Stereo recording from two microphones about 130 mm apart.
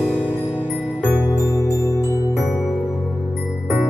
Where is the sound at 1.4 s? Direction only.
25° left (ahead or behind).